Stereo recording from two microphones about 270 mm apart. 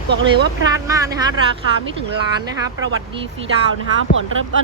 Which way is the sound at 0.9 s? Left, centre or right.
Centre.